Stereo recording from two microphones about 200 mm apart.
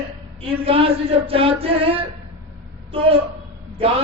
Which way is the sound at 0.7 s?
30° right (ahead or behind).